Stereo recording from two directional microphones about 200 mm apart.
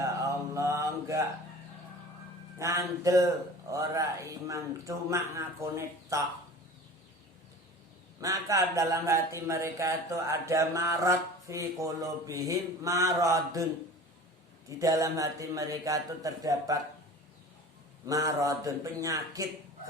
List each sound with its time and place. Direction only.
0.0 s mantra: 15° right (ahead or behind)
2.6 s speech: 15° right (ahead or behind)
8.2 s speech: 15° right (ahead or behind)
14.8 s speech: 15° right (ahead or behind)
18.0 s speech: 15° right (ahead or behind)